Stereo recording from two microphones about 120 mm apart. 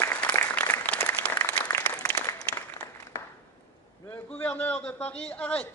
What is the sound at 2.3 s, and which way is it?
Applause, 30° left (ahead or behind).